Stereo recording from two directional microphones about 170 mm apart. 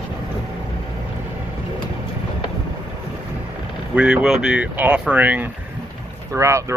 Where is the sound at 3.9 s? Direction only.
5° right (ahead or behind).